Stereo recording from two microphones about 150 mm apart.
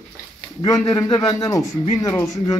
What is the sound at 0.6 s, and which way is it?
A man's voice, 25° left (ahead or behind).